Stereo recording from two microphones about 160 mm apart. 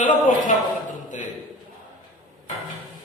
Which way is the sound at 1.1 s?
50° left (ahead or behind).